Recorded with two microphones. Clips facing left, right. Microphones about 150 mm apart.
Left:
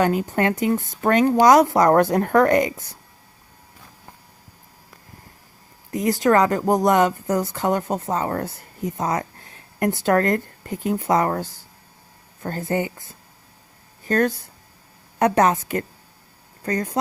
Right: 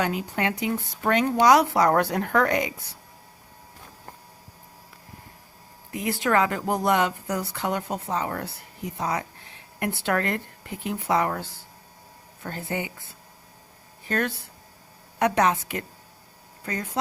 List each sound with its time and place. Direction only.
0.0 s speech: 45° left (ahead or behind)
5.9 s speech: 40° left (ahead or behind)